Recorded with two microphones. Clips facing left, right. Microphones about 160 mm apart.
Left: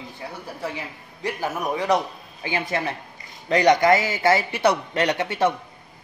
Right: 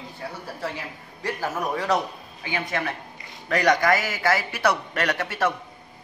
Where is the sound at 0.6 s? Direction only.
15° left (ahead or behind).